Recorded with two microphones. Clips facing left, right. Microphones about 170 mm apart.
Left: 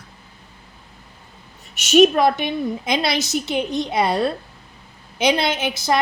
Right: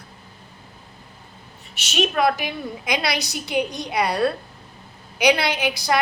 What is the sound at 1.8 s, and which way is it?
Speech, 45° left (ahead or behind).